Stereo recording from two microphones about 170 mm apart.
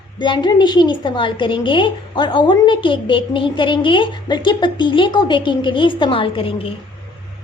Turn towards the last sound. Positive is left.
turn(degrees=30)  # may be behind; listen again after turning